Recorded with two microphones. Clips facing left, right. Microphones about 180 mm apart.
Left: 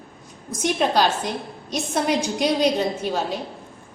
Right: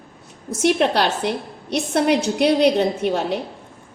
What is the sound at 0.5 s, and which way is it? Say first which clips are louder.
A woman's voice: right 3 dB; 70° right (ahead or behind).